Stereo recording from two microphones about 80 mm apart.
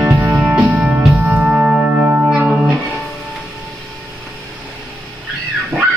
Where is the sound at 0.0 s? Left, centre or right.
Centre.